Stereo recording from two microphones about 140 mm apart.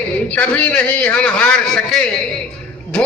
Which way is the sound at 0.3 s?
10° left (ahead or behind).